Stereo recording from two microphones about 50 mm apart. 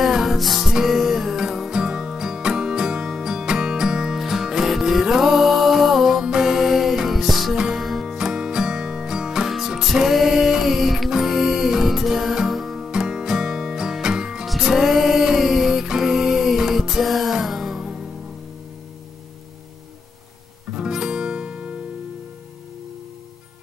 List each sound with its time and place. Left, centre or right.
0.0 s music: centre
12.8 s music: centre
20.7 s guitar: centre